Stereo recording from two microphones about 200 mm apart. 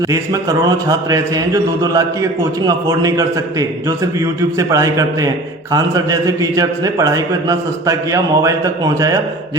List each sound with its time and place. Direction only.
0.1 s a man's voice: 15° right (ahead or behind)